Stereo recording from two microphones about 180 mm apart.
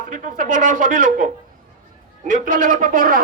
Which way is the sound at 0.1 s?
50° right (ahead or behind).